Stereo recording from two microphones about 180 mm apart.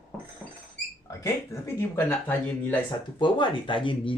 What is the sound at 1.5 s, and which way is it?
Speech, 15° left (ahead or behind).